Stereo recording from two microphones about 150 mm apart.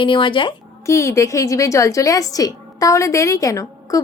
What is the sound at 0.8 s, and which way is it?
A woman's voice, 20° left (ahead or behind).